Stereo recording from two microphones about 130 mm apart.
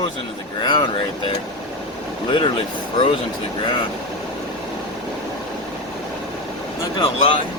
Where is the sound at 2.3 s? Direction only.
40° left (ahead or behind).